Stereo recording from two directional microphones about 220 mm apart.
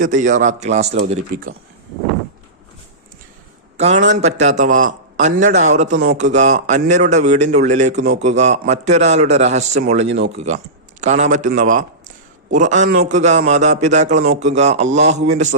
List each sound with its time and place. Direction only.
0.0 s speech: 35° right (ahead or behind)
3.8 s a man's voice: 30° right (ahead or behind)